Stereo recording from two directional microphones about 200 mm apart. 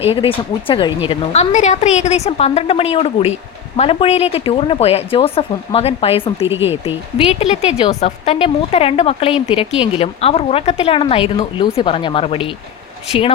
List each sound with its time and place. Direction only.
0.1 s speech: 25° left (ahead or behind)
6.4 s speech: 10° right (ahead or behind)
6.8 s speech: 30° left (ahead or behind)